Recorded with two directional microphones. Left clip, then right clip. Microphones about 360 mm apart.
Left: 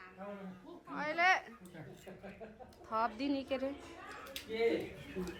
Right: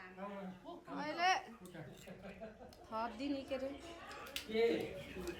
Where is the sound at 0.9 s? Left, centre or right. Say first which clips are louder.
Left 5 dB; centre.